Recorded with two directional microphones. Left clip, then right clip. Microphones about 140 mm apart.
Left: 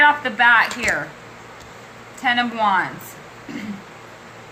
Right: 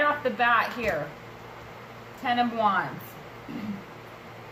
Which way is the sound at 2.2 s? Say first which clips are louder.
Left 6 dB; 20° right (ahead or behind).